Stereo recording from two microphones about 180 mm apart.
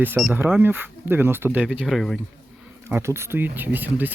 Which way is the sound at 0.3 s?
10° right (ahead or behind).